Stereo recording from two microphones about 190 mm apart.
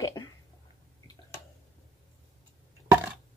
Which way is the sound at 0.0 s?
20° left (ahead or behind).